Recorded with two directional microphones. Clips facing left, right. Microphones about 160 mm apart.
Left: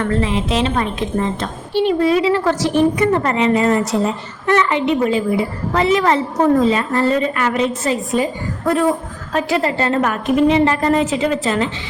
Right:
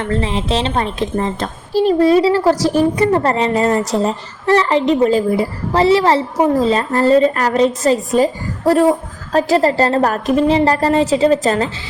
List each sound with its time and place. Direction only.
0.0 s a woman's voice: 30° right (ahead or behind)